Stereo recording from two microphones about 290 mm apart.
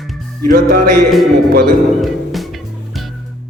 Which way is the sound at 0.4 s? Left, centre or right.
Right.